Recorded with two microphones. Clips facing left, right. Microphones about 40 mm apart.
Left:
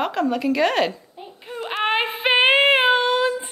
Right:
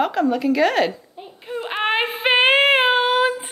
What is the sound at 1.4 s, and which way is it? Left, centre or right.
Child singing, centre.